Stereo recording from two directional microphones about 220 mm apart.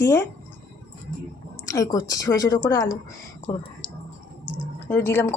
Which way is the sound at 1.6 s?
15° left (ahead or behind).